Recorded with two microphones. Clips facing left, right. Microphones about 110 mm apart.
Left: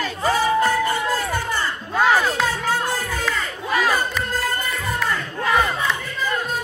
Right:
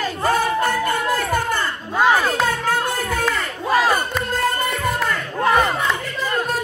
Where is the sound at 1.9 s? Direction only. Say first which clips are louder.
Right 1 dB; 15° right (ahead or behind).